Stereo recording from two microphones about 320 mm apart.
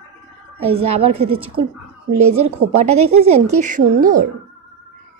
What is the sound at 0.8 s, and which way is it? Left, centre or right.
Speech, right.